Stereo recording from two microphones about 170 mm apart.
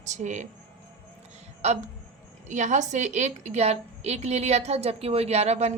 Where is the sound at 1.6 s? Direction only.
40° right (ahead or behind).